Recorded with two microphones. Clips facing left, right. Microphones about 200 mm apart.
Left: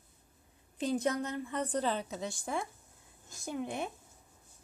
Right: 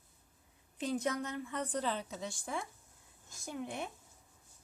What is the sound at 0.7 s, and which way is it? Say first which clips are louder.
A woman's voice: left 3 dB; 30° left (ahead or behind).